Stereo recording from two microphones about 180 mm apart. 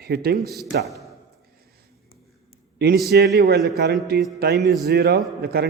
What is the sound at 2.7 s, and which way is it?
A man's voice, 65° right (ahead or behind).